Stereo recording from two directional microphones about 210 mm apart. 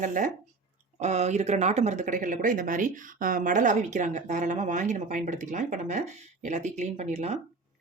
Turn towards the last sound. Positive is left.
turn(degrees=-30)  # may be behind; listen again after turning